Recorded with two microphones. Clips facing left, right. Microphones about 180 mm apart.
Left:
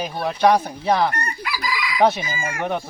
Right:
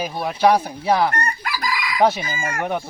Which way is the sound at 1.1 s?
45° right (ahead or behind).